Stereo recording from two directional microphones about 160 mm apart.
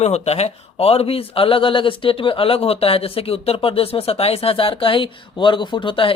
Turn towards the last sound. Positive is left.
turn(degrees=30)  # may be behind; listen again after turning